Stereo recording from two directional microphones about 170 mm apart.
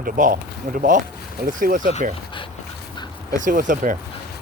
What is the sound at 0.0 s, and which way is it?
Speech, 55° right (ahead or behind).